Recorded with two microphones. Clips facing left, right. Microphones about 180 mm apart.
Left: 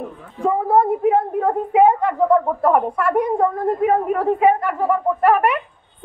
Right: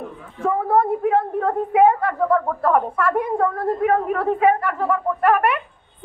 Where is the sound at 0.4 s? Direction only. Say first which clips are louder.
Left 2 dB; 15° left (ahead or behind).